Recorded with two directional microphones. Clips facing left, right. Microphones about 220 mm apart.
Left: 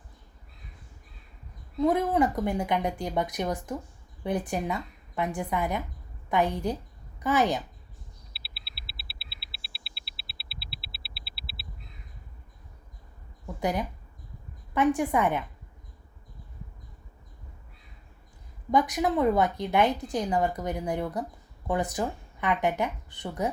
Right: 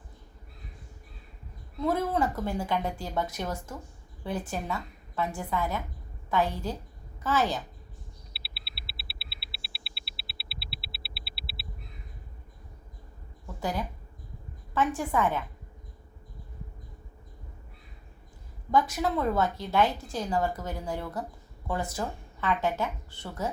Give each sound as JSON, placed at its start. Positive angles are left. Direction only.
{"t": 1.8, "sound": "a woman's voice", "side_deg": 15}
{"t": 8.3, "sound": "mains hum", "side_deg": 0}
{"t": 13.6, "sound": "a woman's voice", "side_deg": 20}
{"t": 18.7, "sound": "a woman's voice", "side_deg": 20}